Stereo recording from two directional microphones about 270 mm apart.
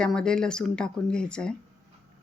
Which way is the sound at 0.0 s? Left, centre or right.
Centre.